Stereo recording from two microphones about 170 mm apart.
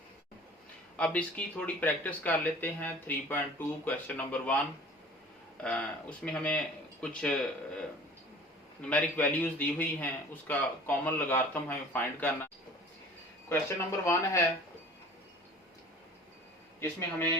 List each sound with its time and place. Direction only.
0.9 s a man's voice: 10° left (ahead or behind)
5.6 s a man's voice: 10° left (ahead or behind)
14.0 s a man's voice: 20° left (ahead or behind)
16.8 s a man's voice: 15° left (ahead or behind)